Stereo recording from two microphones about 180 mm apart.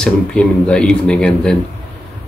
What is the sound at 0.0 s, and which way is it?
Speech, 5° left (ahead or behind).